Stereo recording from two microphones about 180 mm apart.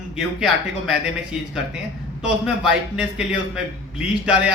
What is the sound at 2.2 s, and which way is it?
A man's voice, 5° right (ahead or behind).